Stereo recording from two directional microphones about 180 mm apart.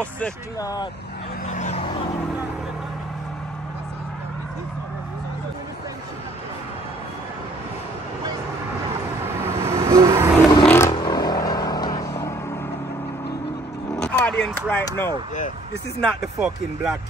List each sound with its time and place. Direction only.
0.6 s speech: 20° left (ahead or behind)
1.5 s vehicle: 40° left (ahead or behind)
9.2 s vehicle: 15° right (ahead or behind)
10.6 s vehicle: 10° left (ahead or behind)
10.9 s vehicle: 25° left (ahead or behind)
13.9 s a sound: 5° left (ahead or behind)
16.0 s speech: centre (ahead or behind)